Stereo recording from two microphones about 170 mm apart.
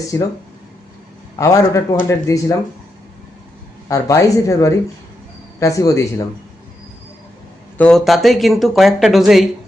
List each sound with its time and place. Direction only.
0.1 s speech: 20° left (ahead or behind)
1.4 s speech: 20° left (ahead or behind)
3.8 s speech: 20° left (ahead or behind)
7.8 s speech: 5° left (ahead or behind)